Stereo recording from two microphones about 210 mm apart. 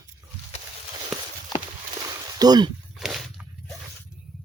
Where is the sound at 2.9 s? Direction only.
Centre (ahead or behind).